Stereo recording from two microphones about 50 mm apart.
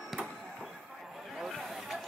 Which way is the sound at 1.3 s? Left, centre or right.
Centre.